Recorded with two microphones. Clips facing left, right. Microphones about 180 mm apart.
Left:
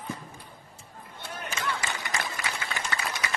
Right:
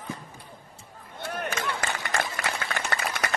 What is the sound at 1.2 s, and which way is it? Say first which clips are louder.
Run: right 5 dB; 60° right (ahead or behind).